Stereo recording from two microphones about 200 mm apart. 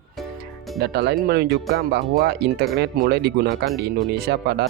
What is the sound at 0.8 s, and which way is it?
Speech, 55° right (ahead or behind).